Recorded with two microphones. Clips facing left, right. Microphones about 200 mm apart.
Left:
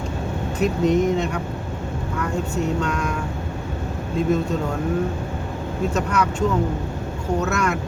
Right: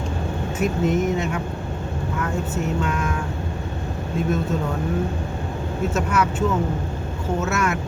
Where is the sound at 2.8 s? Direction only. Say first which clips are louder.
Even; 5° right (ahead or behind).